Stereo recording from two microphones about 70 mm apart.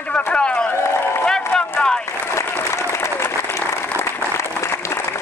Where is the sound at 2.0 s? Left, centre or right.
Left.